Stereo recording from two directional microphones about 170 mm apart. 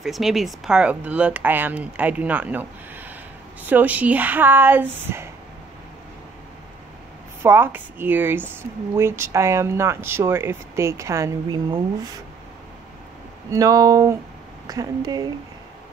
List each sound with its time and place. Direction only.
0.0 s speech: centre (ahead or behind)
7.4 s speech: 15° right (ahead or behind)
13.5 s speech: 20° right (ahead or behind)